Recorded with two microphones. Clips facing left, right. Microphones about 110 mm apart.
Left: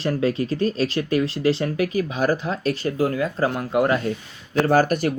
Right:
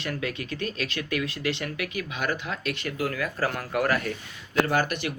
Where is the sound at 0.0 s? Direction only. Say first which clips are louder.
Left 10 dB; 35° left (ahead or behind).